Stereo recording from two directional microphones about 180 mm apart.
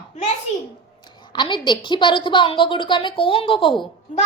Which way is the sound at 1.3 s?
25° left (ahead or behind).